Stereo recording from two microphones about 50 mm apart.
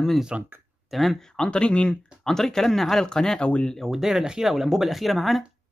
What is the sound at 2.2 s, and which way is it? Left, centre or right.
Speech, centre.